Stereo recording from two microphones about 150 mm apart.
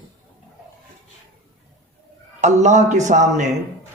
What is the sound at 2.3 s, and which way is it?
Speech, 50° right (ahead or behind).